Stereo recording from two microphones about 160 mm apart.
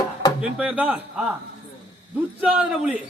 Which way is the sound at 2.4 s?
10° right (ahead or behind).